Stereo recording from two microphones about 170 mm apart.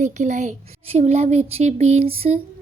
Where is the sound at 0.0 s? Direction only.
45° right (ahead or behind).